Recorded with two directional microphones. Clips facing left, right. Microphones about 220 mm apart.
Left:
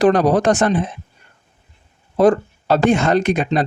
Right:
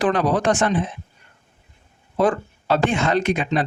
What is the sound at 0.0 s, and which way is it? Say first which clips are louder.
Speech: left 6 dB; 40° left (ahead or behind).